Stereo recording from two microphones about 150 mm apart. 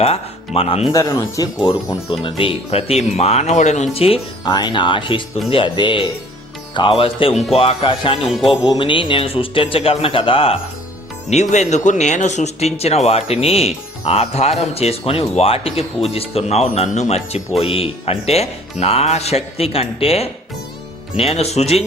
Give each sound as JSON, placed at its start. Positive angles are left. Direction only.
{"t": 0.0, "sound": "speech", "side_deg": 40}
{"t": 0.9, "sound": "speech", "side_deg": 20}
{"t": 1.6, "sound": "speech", "side_deg": 30}
{"t": 8.2, "sound": "speech", "side_deg": 0}
{"t": 8.4, "sound": "speech", "side_deg": 30}
{"t": 11.3, "sound": "speech", "side_deg": 50}